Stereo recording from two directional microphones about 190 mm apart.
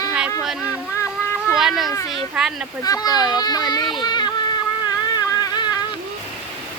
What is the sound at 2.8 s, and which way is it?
Speech, 20° left (ahead or behind).